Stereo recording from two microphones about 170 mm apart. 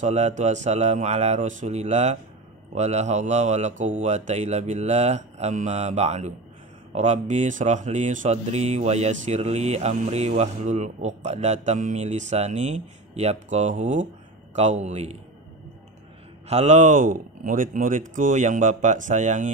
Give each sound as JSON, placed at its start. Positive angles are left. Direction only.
{"t": 0.0, "sound": "speech", "side_deg": -45}
{"t": 16.4, "sound": "speech", "side_deg": -40}